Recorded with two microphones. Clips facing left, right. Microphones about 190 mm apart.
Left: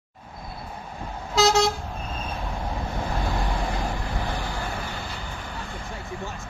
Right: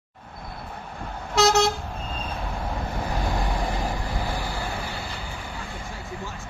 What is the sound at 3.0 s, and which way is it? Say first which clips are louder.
Vehicle: even; centre (ahead or behind).